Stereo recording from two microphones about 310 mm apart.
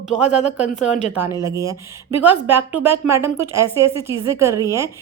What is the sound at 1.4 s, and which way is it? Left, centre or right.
A woman's voice, centre.